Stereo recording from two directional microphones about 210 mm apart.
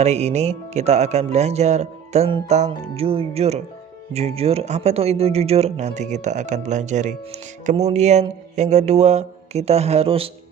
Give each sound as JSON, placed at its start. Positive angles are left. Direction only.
{"t": 0.0, "sound": "speech", "side_deg": -30}